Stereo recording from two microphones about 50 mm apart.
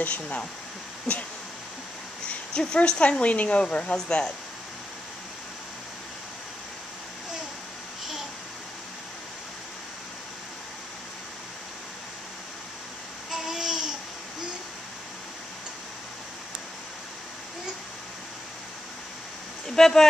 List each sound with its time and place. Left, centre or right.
0.0 s speech: left
2.2 s speech: left
13.3 s babbling: centre
19.7 s speech: centre